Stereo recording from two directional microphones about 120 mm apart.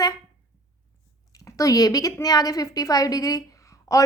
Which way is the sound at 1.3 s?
30° left (ahead or behind).